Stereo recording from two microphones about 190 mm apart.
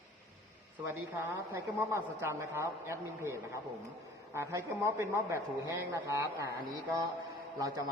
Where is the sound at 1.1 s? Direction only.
15° right (ahead or behind).